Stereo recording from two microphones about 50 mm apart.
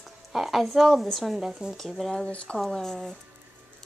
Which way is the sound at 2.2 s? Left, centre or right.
Left.